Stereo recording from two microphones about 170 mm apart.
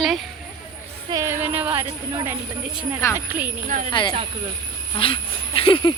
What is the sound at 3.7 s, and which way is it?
Speech, 50° right (ahead or behind).